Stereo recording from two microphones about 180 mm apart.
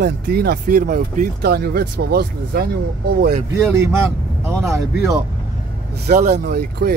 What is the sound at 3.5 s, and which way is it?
Speech, 15° right (ahead or behind).